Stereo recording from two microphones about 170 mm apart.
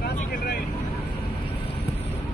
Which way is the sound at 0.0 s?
70° left (ahead or behind).